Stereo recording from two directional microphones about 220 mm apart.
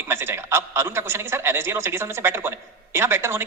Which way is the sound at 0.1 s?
10° right (ahead or behind).